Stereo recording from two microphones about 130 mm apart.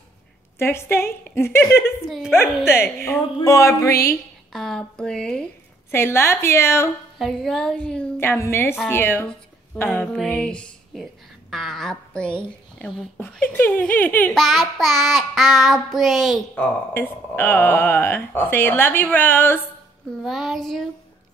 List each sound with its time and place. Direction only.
0.6 s a woman's voice: 20° left (ahead or behind)
2.0 s child singing: centre (ahead or behind)
2.3 s a woman's voice: 20° left (ahead or behind)
4.5 s child singing: 5° left (ahead or behind)
5.9 s a woman's voice: 20° left (ahead or behind)
7.2 s a woman's voice: 5° left (ahead or behind)
14.3 s child singing: centre (ahead or behind)
16.9 s a woman's voice: 15° left (ahead or behind)
20.2 s child singing: centre (ahead or behind)